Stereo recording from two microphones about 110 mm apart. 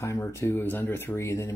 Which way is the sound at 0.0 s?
25° left (ahead or behind).